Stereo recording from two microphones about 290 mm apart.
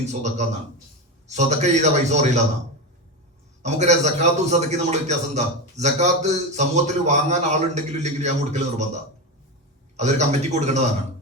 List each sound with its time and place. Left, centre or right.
0.0 s a man's voice: right
3.6 s a man's voice: right
10.0 s a man's voice: right